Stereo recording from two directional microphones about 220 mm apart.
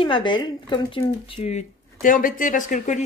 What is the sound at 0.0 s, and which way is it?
Speech, 20° left (ahead or behind).